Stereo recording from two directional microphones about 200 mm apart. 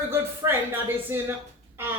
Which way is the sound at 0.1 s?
10° right (ahead or behind).